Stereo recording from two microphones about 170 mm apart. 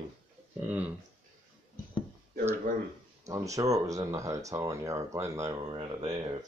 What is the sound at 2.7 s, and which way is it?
Speech, 55° right (ahead or behind).